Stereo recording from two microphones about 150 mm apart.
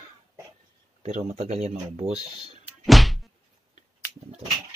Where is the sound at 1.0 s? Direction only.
45° right (ahead or behind).